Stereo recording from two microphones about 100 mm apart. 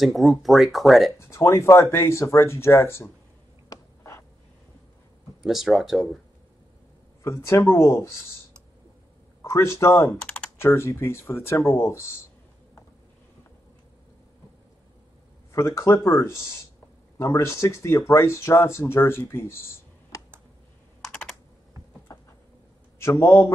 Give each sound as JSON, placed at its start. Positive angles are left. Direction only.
{"t": 0.0, "sound": "speech", "side_deg": 0}
{"t": 1.1, "sound": "speech", "side_deg": 30}
{"t": 3.6, "sound": "a sound", "side_deg": 35}
{"t": 5.4, "sound": "speech", "side_deg": 0}
{"t": 7.2, "sound": "speech", "side_deg": 30}
{"t": 9.4, "sound": "speech", "side_deg": 25}
{"t": 10.2, "sound": "typing", "side_deg": 10}
{"t": 10.6, "sound": "speech", "side_deg": 25}
{"t": 15.5, "sound": "speech", "side_deg": 25}
{"t": 20.1, "sound": "computer keyboard", "side_deg": 35}
{"t": 23.1, "sound": "speech", "side_deg": 40}